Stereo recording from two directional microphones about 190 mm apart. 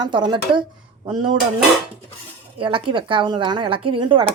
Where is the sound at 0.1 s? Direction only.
25° right (ahead or behind).